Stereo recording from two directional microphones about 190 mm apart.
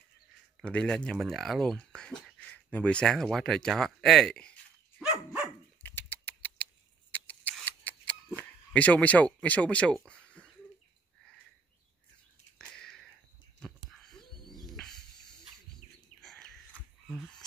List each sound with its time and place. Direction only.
0.6 s speech: 5° left (ahead or behind)
5.8 s rodents: 10° left (ahead or behind)
8.4 s speech: 10° left (ahead or behind)
10.0 s a sound: 5° left (ahead or behind)
12.5 s a sound: 5° left (ahead or behind)
15.8 s bird: 40° left (ahead or behind)
16.2 s whispering: centre (ahead or behind)